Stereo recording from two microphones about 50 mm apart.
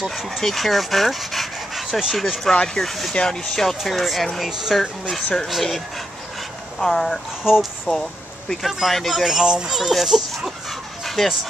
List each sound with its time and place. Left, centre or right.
0.0 s speech: centre
2.1 s speech: centre
2.5 s speech: centre
2.8 s speech: centre
5.1 s speech: centre
7.4 s speech: centre
7.9 s speech: centre
8.6 s speech: centre
9.1 s speech: centre
11.1 s chicken: centre